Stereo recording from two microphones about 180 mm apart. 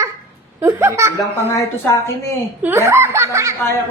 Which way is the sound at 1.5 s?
15° left (ahead or behind).